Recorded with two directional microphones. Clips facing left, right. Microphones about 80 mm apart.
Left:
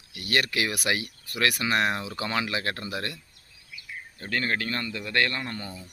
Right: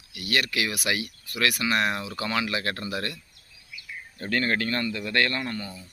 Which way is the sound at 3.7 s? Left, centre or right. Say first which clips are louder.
Right 1 dB; left.